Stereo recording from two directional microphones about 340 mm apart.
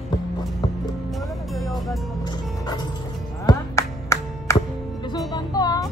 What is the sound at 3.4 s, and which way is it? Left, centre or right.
Music, centre.